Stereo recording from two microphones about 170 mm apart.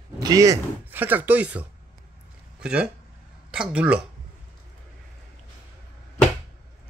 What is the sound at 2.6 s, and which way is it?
Speech, 5° right (ahead or behind).